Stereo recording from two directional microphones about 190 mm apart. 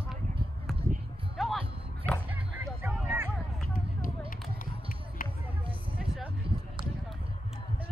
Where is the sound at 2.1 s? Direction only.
5° left (ahead or behind).